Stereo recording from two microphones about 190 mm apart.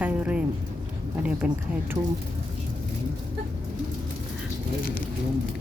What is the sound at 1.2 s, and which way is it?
Speech, 5° right (ahead or behind).